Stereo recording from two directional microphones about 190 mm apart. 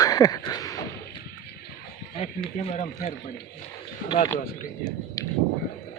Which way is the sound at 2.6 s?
40° left (ahead or behind).